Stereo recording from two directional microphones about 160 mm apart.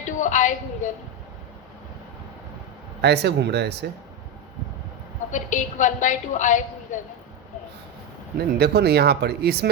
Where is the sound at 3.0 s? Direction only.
90° right.